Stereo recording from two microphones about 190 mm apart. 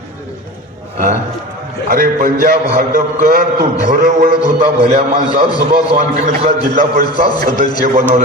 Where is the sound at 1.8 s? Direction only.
45° right (ahead or behind).